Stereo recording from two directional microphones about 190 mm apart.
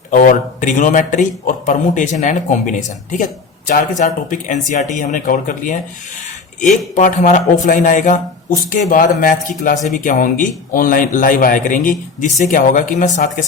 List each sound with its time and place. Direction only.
0.1 s speech: 45° left (ahead or behind)